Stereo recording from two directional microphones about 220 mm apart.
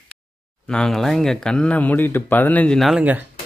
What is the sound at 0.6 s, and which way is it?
Speech, 5° left (ahead or behind).